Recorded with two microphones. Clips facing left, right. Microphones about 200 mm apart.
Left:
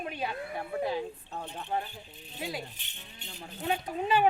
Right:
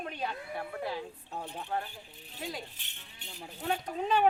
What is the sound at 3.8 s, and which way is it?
Speech, 5° left (ahead or behind).